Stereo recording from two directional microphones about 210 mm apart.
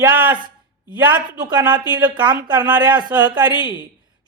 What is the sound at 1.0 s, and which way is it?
Speech, 20° right (ahead or behind).